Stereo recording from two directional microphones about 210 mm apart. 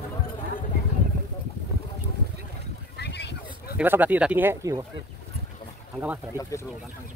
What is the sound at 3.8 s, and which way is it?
Speech, 10° right (ahead or behind).